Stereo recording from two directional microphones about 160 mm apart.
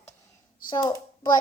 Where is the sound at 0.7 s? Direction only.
25° left (ahead or behind).